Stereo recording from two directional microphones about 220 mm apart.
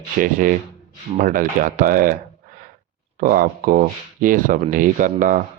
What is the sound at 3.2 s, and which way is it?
Speech, 40° right (ahead or behind).